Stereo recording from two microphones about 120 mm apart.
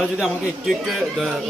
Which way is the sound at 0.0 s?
5° right (ahead or behind).